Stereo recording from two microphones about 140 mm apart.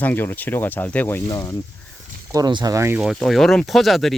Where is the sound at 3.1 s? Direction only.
Centre (ahead or behind).